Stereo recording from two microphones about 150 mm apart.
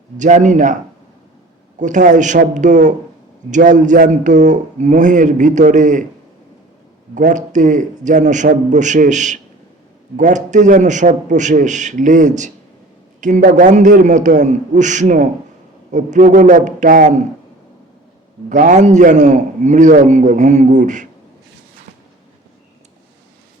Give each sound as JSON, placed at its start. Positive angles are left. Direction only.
{"t": 0.2, "sound": "a man's voice", "side_deg": -55}
{"t": 1.8, "sound": "a man's voice", "side_deg": -55}
{"t": 7.1, "sound": "a man's voice", "side_deg": -55}
{"t": 18.4, "sound": "a man's voice", "side_deg": -60}